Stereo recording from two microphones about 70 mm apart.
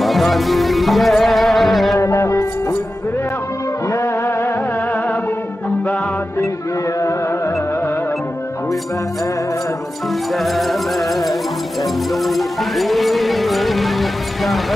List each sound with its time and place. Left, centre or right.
0.0 s music: centre
2.0 s music: left
3.9 s music: left
7.0 s music: left
10.3 s music: centre